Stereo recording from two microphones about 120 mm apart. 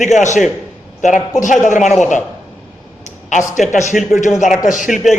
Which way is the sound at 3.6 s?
85° left.